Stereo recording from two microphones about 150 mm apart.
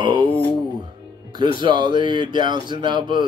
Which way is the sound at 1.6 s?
30° right (ahead or behind).